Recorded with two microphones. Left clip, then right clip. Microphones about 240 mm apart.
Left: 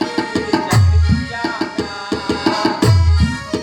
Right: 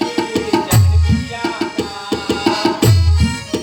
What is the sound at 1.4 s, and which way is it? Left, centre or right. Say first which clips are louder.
Music: right 1 dB; left.